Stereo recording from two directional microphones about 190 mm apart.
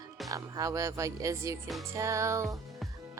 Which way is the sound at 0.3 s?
20° right (ahead or behind).